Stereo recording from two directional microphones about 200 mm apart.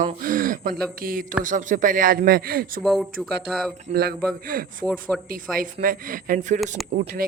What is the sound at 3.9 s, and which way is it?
Speech, 35° right (ahead or behind).